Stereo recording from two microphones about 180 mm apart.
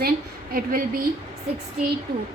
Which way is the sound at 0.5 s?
55° right (ahead or behind).